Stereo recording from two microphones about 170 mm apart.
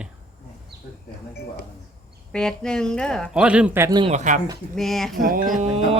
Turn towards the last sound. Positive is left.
turn(degrees=-35)  # may be behind; listen again after turning